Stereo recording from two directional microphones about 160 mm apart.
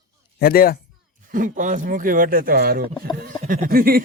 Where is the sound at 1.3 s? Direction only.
55° right (ahead or behind); by 2.8 s 70° right (ahead or behind).